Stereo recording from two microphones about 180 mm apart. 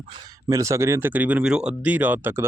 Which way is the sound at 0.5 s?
15° right (ahead or behind).